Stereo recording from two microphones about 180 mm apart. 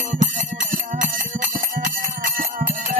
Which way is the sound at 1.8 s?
50° right (ahead or behind).